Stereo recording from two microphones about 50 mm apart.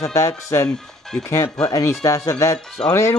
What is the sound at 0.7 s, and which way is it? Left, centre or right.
Speech, centre.